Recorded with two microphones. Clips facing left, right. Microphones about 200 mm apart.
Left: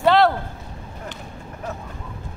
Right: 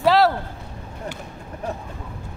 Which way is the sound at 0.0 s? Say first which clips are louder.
Left 1 dB; centre (ahead or behind).